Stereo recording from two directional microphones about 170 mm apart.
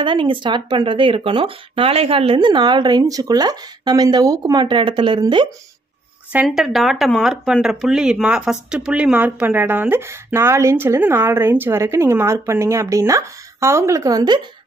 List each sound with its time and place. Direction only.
0.0 s speech: 30° right (ahead or behind)
6.3 s speech: 5° right (ahead or behind); by 14.4 s 25° right (ahead or behind)